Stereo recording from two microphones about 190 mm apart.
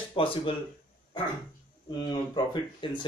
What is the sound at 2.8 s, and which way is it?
Speech, 25° left (ahead or behind).